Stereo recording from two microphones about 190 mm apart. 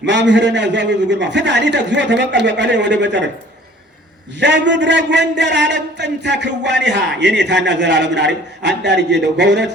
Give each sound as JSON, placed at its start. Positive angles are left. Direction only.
{"t": 0.0, "sound": "a man's voice", "side_deg": -65}
{"t": 4.4, "sound": "a man's voice", "side_deg": -65}